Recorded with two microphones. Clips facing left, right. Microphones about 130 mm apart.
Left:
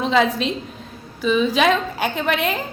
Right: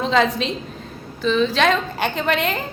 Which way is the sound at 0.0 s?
Centre (ahead or behind).